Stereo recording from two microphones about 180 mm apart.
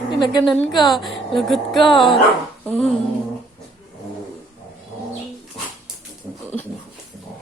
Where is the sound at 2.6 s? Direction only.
10° left (ahead or behind).